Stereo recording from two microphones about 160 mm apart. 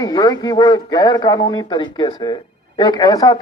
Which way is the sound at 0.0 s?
25° left (ahead or behind).